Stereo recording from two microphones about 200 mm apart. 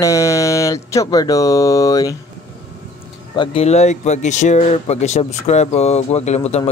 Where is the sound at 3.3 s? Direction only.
25° left (ahead or behind).